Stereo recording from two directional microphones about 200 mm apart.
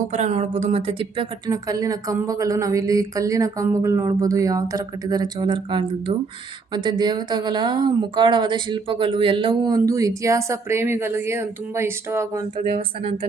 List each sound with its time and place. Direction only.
0.1 s a woman's voice: 35° right (ahead or behind); by 12.5 s 15° right (ahead or behind)
12.5 s a woman's voice: 30° right (ahead or behind)